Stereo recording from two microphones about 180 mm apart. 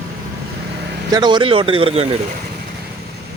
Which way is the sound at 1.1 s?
25° right (ahead or behind).